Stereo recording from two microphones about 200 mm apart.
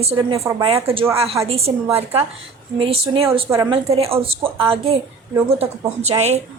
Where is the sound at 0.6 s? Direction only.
30° right (ahead or behind).